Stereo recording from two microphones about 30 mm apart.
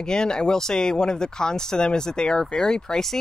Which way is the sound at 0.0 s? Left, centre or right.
Left.